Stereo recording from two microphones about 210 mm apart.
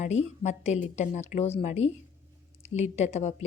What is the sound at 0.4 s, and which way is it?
A woman's voice, 35° left (ahead or behind).